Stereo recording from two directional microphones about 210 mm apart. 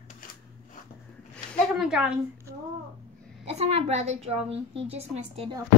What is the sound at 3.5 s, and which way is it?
A woman's voice, 30° right (ahead or behind).